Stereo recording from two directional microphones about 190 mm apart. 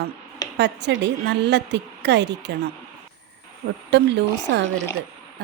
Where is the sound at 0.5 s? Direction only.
65° right (ahead or behind).